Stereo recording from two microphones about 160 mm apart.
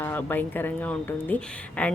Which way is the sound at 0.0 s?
10° left (ahead or behind).